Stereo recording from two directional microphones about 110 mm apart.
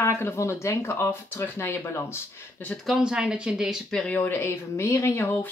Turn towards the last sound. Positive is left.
turn(degrees=25)  # may be behind; listen again after turning